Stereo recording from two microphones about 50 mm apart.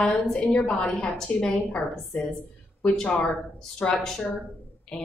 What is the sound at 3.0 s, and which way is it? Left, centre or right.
Speech, left.